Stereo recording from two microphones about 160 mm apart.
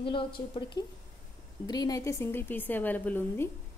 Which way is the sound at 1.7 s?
25° left (ahead or behind).